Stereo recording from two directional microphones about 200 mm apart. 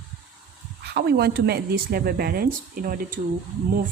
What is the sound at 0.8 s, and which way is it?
Speech, 55° right (ahead or behind).